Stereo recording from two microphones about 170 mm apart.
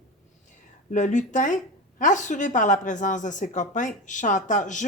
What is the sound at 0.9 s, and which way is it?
Speech, 45° left (ahead or behind).